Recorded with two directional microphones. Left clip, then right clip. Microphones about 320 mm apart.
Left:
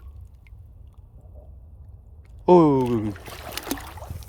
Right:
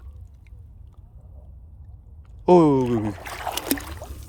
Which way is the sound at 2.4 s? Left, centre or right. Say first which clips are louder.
Even; centre.